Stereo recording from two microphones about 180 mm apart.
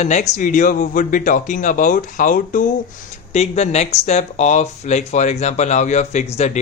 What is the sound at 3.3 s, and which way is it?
Speech, 35° left (ahead or behind).